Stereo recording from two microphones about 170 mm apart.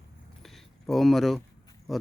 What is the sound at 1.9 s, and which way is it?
Speech, centre (ahead or behind).